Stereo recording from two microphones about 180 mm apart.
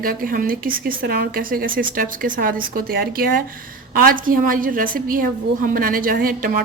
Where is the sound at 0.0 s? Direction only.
50° right (ahead or behind).